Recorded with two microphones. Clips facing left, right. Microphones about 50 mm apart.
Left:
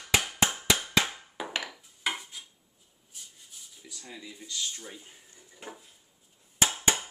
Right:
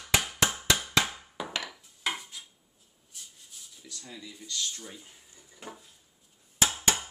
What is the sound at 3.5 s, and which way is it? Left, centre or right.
Speech, centre.